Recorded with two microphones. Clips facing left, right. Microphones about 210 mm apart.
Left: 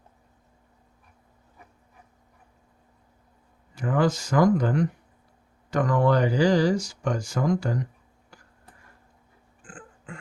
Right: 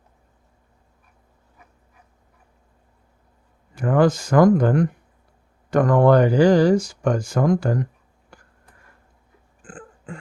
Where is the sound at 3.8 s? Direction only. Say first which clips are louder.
Right 6 dB; 55° right (ahead or behind).